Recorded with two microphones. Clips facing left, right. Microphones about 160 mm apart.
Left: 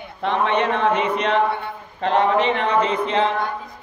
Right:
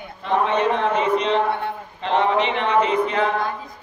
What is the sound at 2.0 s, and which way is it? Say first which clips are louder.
Speech: left 2 dB; 45° left (ahead or behind).